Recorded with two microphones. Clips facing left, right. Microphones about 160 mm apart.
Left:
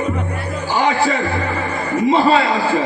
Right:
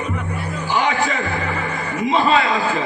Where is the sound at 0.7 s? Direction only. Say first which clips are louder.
Left 3 dB; 35° left (ahead or behind).